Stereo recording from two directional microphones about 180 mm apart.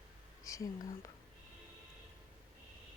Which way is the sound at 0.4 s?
20° left (ahead or behind).